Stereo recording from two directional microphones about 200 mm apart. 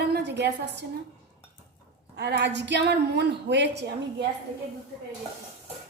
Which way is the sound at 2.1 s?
55° right (ahead or behind).